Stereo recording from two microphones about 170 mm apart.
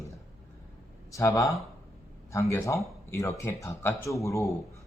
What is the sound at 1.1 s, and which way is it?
Speech, 20° left (ahead or behind).